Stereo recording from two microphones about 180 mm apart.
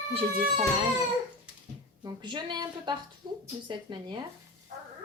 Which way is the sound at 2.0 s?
25° right (ahead or behind).